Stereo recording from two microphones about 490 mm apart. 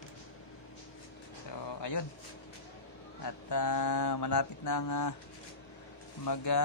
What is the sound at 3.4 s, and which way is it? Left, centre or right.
Speech, left.